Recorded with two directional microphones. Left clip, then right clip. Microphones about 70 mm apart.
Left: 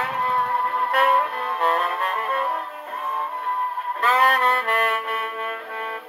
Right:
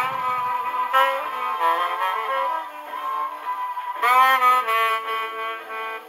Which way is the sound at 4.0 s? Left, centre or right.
Left.